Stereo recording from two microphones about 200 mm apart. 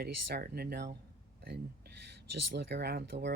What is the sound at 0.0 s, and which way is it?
Speech, 50° right (ahead or behind).